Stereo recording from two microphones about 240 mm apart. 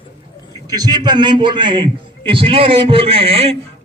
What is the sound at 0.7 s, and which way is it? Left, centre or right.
A man's voice, centre.